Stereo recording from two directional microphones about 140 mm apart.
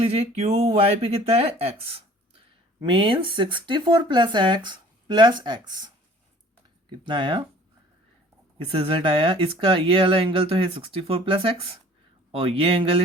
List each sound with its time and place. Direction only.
0.0 s speech: 45° right (ahead or behind)
7.1 s speech: 35° right (ahead or behind)
8.5 s speech: 40° right (ahead or behind)